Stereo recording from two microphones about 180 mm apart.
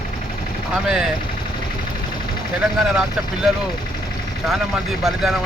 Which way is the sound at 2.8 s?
Centre (ahead or behind).